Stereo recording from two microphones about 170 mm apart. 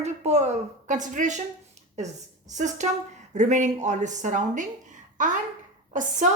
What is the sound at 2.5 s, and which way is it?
A woman's voice, 45° right (ahead or behind).